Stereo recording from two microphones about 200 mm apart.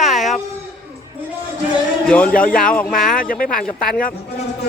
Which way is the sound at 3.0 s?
45° left (ahead or behind).